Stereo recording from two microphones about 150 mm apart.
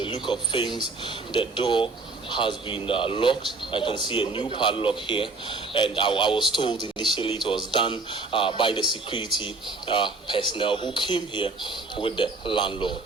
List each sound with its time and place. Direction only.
0.0 s speech: 30° left (ahead or behind)